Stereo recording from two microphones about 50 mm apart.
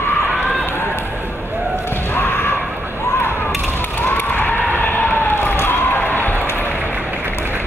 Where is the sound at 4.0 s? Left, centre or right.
Left.